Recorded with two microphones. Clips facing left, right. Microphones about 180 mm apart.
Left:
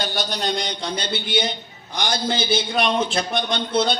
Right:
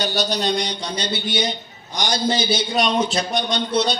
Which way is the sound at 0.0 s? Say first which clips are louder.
Right 3 dB; 55° left (ahead or behind).